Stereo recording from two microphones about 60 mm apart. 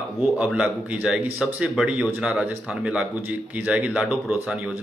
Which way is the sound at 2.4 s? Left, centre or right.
Centre.